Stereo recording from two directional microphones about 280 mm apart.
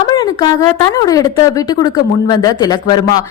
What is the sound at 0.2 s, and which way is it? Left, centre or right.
A woman's voice, centre.